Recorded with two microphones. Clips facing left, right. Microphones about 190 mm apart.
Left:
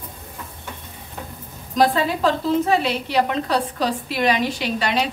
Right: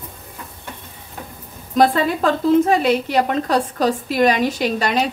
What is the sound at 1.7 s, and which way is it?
A woman's voice, 50° right (ahead or behind).